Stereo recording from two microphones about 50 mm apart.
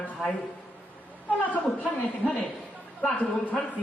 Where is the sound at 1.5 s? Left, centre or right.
Left.